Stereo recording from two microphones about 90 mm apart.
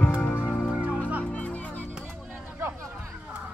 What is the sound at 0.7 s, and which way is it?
Music, 10° right (ahead or behind).